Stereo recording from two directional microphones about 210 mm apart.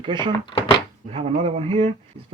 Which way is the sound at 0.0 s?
20° right (ahead or behind).